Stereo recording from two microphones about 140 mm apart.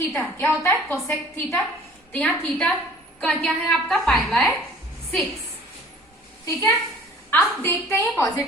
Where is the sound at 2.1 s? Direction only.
10° left (ahead or behind).